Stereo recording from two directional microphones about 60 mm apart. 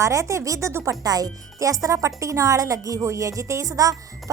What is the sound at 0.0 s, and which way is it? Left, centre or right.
Speech, right.